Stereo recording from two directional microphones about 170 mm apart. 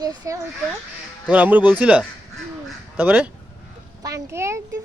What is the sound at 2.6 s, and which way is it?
Crow, 10° right (ahead or behind).